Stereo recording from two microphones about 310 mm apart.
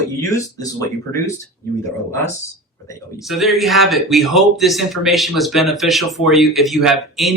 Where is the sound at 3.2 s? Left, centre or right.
Centre.